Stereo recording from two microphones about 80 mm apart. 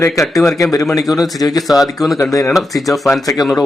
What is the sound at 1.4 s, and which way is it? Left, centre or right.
Speech, left.